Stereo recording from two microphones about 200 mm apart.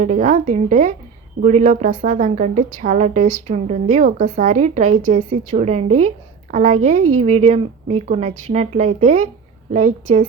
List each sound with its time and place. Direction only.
0.0 s a woman's voice: 35° right (ahead or behind)